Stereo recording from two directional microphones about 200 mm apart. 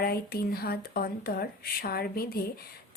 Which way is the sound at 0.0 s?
50° left (ahead or behind).